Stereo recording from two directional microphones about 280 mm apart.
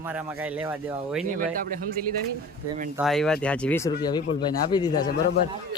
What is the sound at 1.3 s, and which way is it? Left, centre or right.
Speech, right.